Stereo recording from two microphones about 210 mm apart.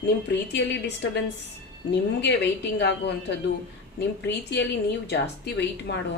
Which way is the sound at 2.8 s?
55° left (ahead or behind).